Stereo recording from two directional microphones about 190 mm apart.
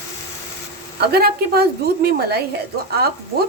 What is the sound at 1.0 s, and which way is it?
Speech, 55° right (ahead or behind).